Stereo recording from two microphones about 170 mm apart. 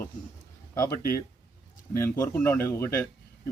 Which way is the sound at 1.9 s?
15° left (ahead or behind).